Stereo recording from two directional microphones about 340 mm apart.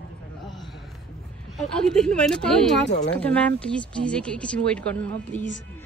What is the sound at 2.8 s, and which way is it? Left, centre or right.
Speech, left.